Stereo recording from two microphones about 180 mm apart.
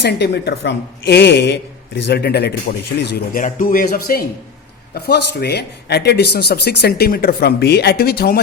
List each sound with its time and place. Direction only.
0.0 s a woman's voice: 65° left (ahead or behind)
3.4 s speech: 45° left (ahead or behind)
4.9 s speech: 65° left (ahead or behind)